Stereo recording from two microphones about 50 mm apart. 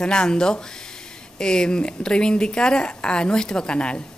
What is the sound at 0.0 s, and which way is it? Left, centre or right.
Speech, centre.